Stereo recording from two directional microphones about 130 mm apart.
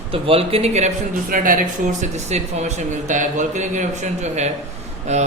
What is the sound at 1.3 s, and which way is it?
A man's voice, 90° right.